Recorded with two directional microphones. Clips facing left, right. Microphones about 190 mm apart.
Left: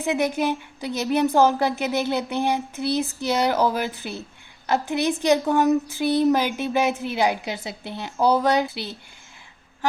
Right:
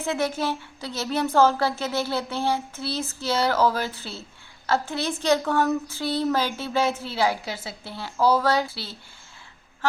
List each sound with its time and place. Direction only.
0.0 s speech: 15° left (ahead or behind)